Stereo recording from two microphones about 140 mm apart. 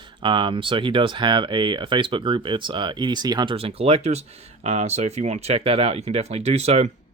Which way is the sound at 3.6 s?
45° right (ahead or behind).